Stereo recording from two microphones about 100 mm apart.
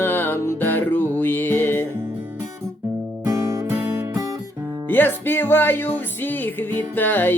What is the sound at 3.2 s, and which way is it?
Music, 35° right (ahead or behind).